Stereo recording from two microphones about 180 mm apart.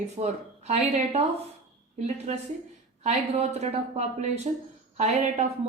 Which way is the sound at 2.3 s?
35° right (ahead or behind).